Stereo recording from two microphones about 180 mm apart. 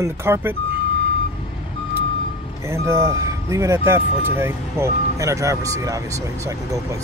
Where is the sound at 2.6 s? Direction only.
15° right (ahead or behind).